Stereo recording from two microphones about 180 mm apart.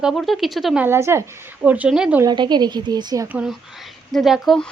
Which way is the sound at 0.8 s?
15° right (ahead or behind).